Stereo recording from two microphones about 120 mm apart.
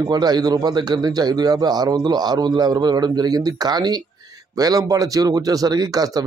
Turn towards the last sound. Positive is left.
turn(degrees=-30)  # may be behind; listen again after turning